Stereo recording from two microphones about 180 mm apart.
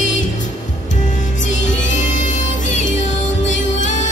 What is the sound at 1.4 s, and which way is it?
Music, 45° left (ahead or behind).